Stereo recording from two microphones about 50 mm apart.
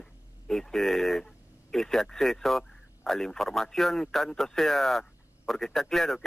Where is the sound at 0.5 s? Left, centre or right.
Centre.